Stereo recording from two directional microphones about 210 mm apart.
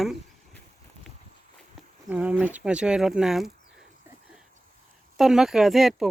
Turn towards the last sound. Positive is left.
turn(degrees=0)  # may be behind; listen again after turning